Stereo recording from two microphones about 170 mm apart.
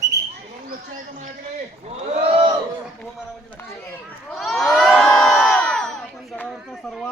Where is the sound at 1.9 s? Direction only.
35° right (ahead or behind).